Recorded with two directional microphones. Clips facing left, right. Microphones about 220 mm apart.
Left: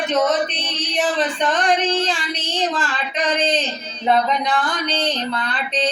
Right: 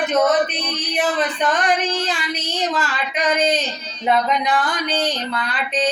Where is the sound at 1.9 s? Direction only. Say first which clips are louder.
Left 2 dB; 30° left (ahead or behind).